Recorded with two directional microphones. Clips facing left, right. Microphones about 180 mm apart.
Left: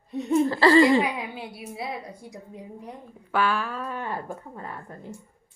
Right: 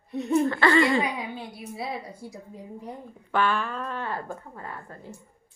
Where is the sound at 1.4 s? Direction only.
5° left (ahead or behind).